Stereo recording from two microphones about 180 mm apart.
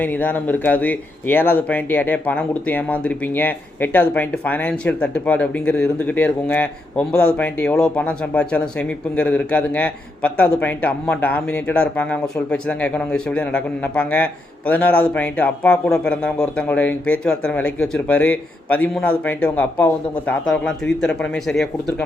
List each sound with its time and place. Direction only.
0.0 s speech: 10° left (ahead or behind)